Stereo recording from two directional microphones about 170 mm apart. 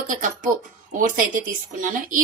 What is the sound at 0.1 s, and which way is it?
Speech, 50° right (ahead or behind).